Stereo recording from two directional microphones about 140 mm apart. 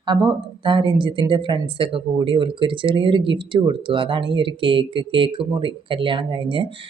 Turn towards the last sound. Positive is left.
turn(degrees=-35)  # may be behind; listen again after turning